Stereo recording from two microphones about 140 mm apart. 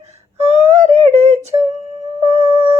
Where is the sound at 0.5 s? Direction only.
50° right (ahead or behind).